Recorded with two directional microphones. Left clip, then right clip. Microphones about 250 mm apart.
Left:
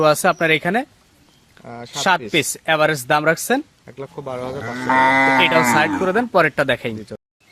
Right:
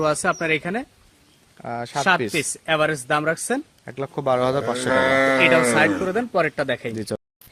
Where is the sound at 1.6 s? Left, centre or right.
Right.